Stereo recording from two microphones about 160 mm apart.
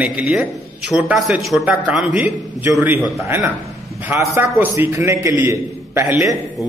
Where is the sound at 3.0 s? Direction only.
Centre (ahead or behind).